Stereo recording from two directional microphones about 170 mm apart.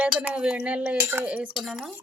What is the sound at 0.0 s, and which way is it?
Speech, 5° right (ahead or behind).